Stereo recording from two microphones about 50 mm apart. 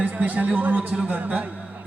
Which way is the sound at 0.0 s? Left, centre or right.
Right.